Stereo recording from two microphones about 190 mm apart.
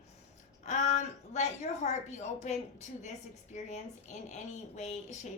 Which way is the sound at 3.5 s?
40° left (ahead or behind).